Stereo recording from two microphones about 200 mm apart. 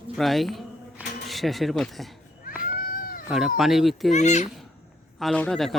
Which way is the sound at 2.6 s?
45° left (ahead or behind).